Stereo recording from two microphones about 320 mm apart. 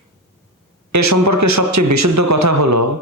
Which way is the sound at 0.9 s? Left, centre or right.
Right.